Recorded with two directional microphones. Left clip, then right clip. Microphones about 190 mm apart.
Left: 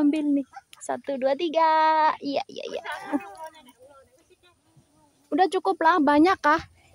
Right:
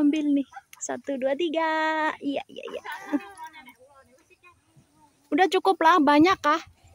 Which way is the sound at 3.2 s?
60° right (ahead or behind).